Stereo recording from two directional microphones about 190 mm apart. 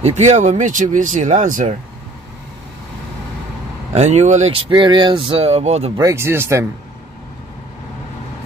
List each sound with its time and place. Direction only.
0.0 s speech: 35° right (ahead or behind)
3.9 s speech: 35° right (ahead or behind)
5.9 s speech: 15° right (ahead or behind)